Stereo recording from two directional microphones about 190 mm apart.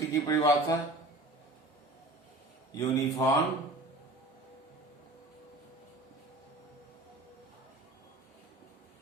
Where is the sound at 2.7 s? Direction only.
15° left (ahead or behind).